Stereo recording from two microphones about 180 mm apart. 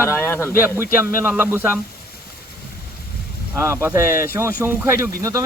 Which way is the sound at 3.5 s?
15° right (ahead or behind).